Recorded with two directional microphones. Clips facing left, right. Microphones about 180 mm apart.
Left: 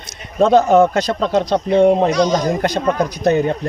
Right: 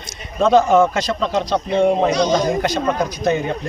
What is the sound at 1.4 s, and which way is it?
Speech, 55° left (ahead or behind).